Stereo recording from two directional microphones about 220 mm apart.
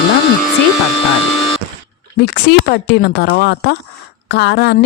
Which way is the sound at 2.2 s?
45° left (ahead or behind).